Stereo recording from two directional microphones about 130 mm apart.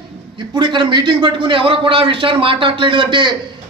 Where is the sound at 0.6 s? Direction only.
35° right (ahead or behind).